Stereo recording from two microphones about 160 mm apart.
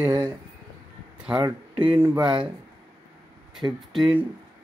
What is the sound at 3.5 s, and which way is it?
Speech, centre (ahead or behind).